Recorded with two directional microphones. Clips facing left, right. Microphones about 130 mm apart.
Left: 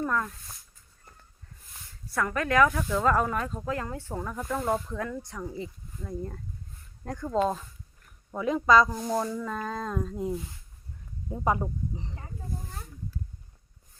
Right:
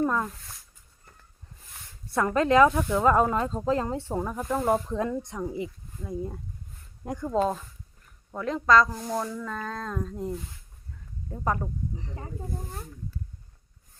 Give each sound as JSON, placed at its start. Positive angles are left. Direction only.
{"t": 0.0, "sound": "a sound", "side_deg": -20}
{"t": 2.1, "sound": "speech", "side_deg": -25}
{"t": 8.3, "sound": "speech", "side_deg": 5}